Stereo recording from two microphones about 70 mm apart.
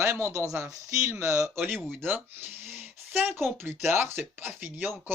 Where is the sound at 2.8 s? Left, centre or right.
Right.